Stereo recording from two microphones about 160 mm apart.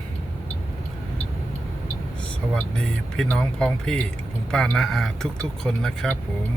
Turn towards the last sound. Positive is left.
turn(degrees=5)  # may be behind; listen again after turning